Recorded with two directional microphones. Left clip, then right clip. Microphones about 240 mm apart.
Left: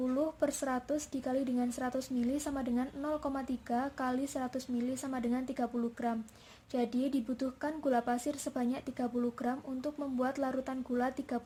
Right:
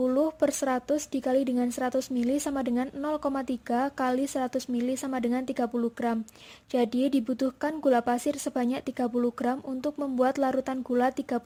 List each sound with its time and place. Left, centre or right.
0.0 s a woman's voice: right